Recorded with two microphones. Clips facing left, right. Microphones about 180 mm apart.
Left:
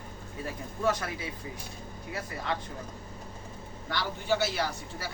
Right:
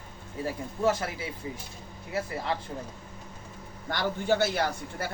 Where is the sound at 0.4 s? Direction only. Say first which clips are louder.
Right 3 dB; 25° right (ahead or behind).